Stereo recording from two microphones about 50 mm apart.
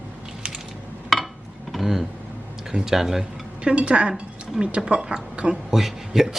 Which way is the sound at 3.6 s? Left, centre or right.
Right.